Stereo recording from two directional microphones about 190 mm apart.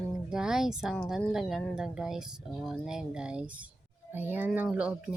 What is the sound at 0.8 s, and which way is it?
Speech, centre (ahead or behind).